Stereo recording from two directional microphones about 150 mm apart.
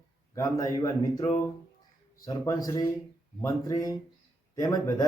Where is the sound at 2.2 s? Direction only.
25° left (ahead or behind).